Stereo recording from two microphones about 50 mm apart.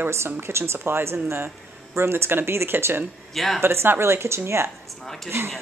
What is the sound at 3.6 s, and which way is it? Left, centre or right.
A woman's voice, right.